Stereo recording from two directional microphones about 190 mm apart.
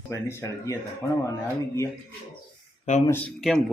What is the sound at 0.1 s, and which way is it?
Speech, 15° left (ahead or behind).